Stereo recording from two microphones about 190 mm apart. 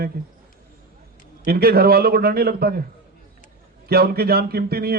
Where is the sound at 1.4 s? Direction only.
55° right (ahead or behind).